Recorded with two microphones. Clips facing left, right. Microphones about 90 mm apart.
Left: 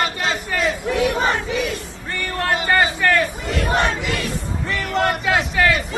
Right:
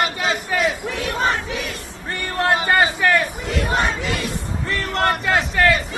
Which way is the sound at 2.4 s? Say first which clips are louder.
Right 1 dB; 15° right (ahead or behind).